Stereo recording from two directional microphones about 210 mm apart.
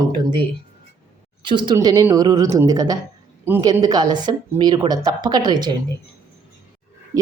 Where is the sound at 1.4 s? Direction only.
20° right (ahead or behind).